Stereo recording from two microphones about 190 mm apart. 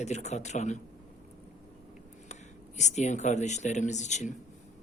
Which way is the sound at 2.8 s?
40° left (ahead or behind).